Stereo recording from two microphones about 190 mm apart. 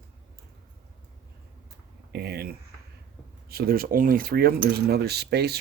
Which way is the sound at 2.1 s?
55° right (ahead or behind).